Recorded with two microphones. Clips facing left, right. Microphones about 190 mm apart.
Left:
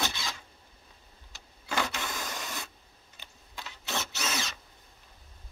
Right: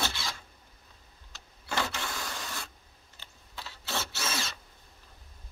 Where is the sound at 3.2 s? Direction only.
15° left (ahead or behind).